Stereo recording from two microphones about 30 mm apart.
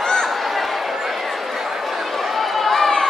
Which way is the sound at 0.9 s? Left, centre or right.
Centre.